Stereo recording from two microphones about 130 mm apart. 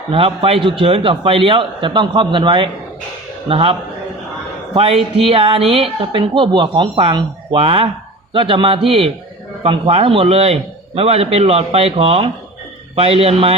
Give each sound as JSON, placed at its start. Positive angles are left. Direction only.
{"t": 0.1, "sound": "a man's voice", "side_deg": -45}